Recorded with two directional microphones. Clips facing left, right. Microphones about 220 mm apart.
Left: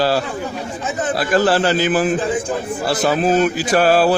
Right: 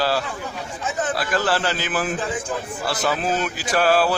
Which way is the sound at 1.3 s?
35° left (ahead or behind).